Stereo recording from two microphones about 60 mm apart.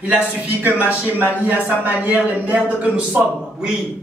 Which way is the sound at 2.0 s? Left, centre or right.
Right.